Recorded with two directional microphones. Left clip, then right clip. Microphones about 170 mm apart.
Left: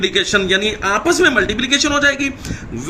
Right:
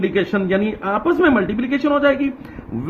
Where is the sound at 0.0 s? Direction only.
55° right (ahead or behind).